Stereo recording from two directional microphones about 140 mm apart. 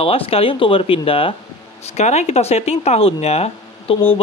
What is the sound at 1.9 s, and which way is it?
Speech, 50° left (ahead or behind).